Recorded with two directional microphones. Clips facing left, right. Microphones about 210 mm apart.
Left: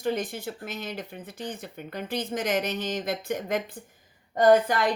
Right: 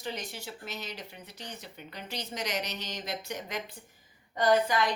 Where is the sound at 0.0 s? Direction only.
50° left (ahead or behind).